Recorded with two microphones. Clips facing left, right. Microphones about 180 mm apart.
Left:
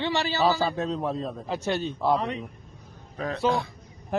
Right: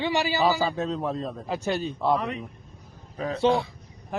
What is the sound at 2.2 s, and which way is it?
Speech, 35° left (ahead or behind).